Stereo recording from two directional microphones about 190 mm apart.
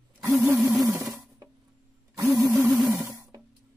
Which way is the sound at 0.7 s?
15° right (ahead or behind).